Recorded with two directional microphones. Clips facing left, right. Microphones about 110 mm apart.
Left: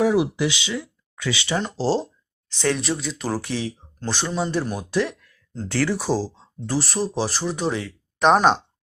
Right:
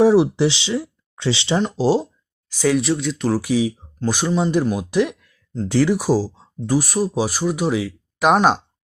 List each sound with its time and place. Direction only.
0.0 s speech: 30° right (ahead or behind)
1.7 s speech: 15° right (ahead or behind); by 3.4 s centre (ahead or behind)
3.4 s speech: 10° right (ahead or behind)